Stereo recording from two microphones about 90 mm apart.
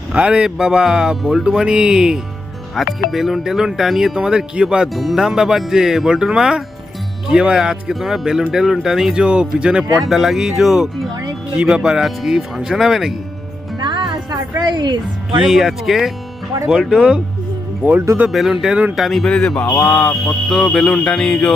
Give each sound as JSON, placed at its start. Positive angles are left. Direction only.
{"t": 0.1, "sound": "speech", "side_deg": -10}
{"t": 13.7, "sound": "music", "side_deg": -60}
{"t": 14.6, "sound": "speech", "side_deg": -55}
{"t": 15.4, "sound": "speech", "side_deg": -5}
{"t": 18.3, "sound": "speech", "side_deg": 0}
{"t": 20.2, "sound": "speech", "side_deg": 5}